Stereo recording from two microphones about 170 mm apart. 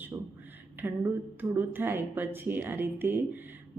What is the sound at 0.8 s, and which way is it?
A woman's voice, 10° right (ahead or behind).